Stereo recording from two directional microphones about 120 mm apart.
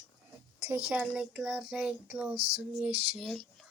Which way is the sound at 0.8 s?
10° right (ahead or behind).